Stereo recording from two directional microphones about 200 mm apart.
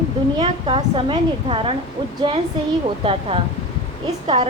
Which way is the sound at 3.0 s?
30° right (ahead or behind).